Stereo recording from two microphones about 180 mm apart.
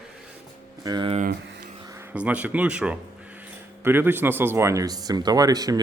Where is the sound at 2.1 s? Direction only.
5° right (ahead or behind).